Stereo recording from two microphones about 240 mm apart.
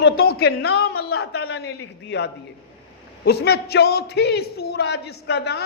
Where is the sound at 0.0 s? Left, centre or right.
Left.